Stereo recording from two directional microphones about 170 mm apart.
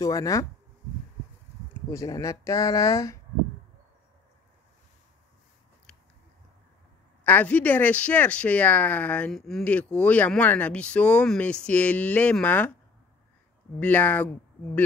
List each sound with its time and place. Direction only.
0.0 s speech: 20° left (ahead or behind)
1.9 s speech: 20° left (ahead or behind)
7.2 s speech: 10° left (ahead or behind)
13.7 s speech: 10° left (ahead or behind)